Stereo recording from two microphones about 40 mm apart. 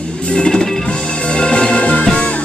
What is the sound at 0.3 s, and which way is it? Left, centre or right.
Music, centre.